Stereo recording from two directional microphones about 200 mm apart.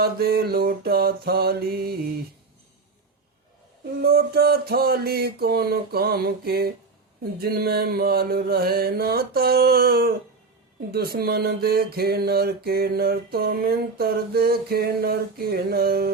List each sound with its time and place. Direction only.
0.0 s mantra: 50° right (ahead or behind)
4.0 s mantra: 50° right (ahead or behind)